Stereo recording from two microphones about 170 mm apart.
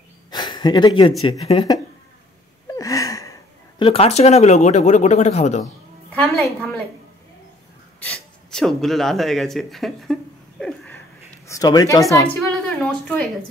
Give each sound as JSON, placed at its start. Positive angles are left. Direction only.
{"t": 0.3, "sound": "a sound", "side_deg": 25}
{"t": 1.4, "sound": "speech", "side_deg": 35}
{"t": 2.7, "sound": "gasp", "side_deg": 20}
{"t": 3.8, "sound": "speech", "side_deg": 35}
{"t": 6.1, "sound": "a woman's voice", "side_deg": 5}
{"t": 8.0, "sound": "a woman's voice", "side_deg": 5}
{"t": 11.4, "sound": "speech", "side_deg": 20}
{"t": 12.4, "sound": "speech", "side_deg": 5}